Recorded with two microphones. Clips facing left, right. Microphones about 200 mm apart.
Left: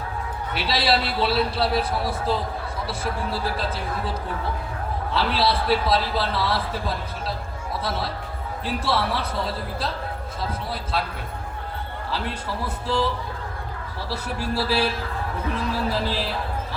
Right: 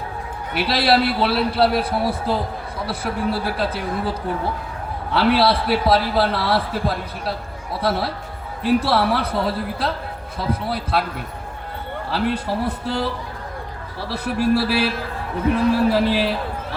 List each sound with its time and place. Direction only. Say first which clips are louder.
0.5 s a man's voice: right 5 dB; 60° right (ahead or behind)
5.1 s a man's voice: right 6 dB; 65° right (ahead or behind)
12.1 s a man's voice: right 8 dB; 60° right (ahead or behind)
14.1 s a man's voice: right 9 dB; 65° right (ahead or behind)
15.9 s a man's voice: right 8 dB; 65° right (ahead or behind)